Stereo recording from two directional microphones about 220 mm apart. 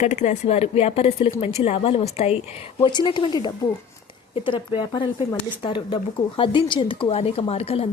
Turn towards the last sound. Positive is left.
turn(degrees=25)  # may be behind; listen again after turning